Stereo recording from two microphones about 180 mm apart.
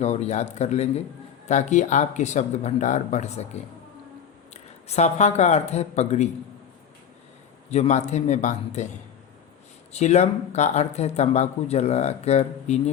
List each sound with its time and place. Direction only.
0.0 s speech: 40° left (ahead or behind)
7.7 s speech: 40° left (ahead or behind)
9.9 s speech: 40° left (ahead or behind)